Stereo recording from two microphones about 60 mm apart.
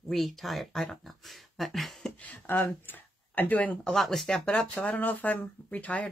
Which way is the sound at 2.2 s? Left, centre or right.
Left.